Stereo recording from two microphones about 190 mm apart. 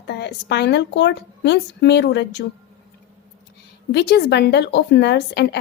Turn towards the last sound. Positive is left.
turn(degrees=60)  # may be behind; listen again after turning